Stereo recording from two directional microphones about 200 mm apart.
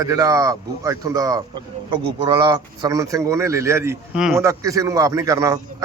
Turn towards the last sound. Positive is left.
turn(degrees=-15)  # may be behind; listen again after turning